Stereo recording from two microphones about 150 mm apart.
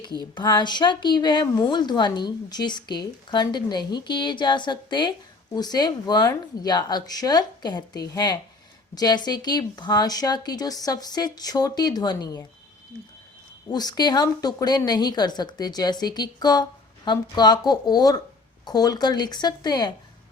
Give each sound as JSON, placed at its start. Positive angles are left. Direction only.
{"t": 0.0, "sound": "a woman's voice", "side_deg": 30}
{"t": 13.7, "sound": "a woman's voice", "side_deg": 25}